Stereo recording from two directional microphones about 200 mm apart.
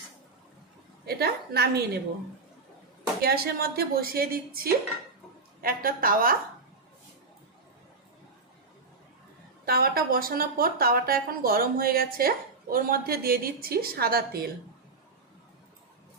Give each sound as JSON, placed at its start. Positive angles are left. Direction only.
{"t": 1.0, "sound": "speech", "side_deg": -50}
{"t": 3.2, "sound": "speech", "side_deg": -50}
{"t": 9.6, "sound": "speech", "side_deg": -50}